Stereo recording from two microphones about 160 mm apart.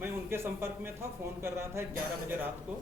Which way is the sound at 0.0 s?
15° right (ahead or behind).